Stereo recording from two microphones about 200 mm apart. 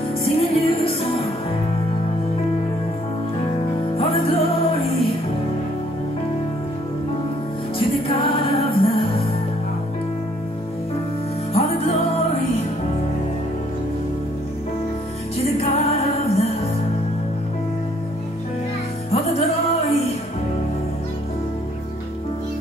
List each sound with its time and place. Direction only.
0.2 s music: 30° left (ahead or behind)
4.0 s music: 30° left (ahead or behind)
7.8 s music: 30° left (ahead or behind)
11.5 s music: 30° left (ahead or behind)
15.6 s music: 30° left (ahead or behind)
19.1 s music: 30° left (ahead or behind)